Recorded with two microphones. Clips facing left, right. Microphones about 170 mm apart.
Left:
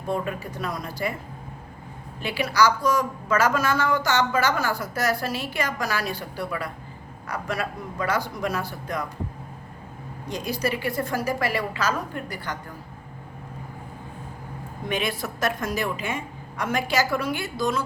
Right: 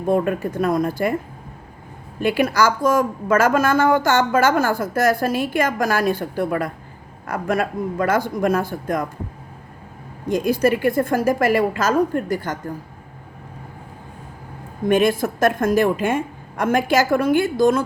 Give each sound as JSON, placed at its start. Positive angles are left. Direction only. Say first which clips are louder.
{"t": 0.0, "sound": "a woman's voice", "louder": "right 9 dB", "side_deg": -50}
{"t": 2.2, "sound": "a woman's voice", "louder": "right 4 dB", "side_deg": -50}
{"t": 10.2, "sound": "a woman's voice", "louder": "right 10 dB", "side_deg": -50}
{"t": 14.8, "sound": "a woman's voice", "louder": "right 11 dB", "side_deg": -50}